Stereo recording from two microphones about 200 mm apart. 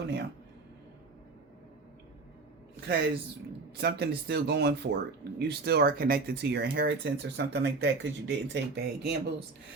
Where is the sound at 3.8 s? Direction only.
55° right (ahead or behind).